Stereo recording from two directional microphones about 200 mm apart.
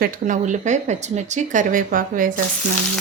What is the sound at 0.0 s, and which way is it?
Speech, 40° right (ahead or behind).